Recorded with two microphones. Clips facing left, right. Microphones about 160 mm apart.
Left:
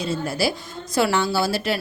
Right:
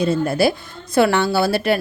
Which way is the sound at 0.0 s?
55° right (ahead or behind).